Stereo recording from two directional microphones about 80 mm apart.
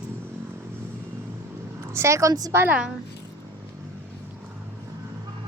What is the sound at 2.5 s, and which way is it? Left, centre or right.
Speech, right.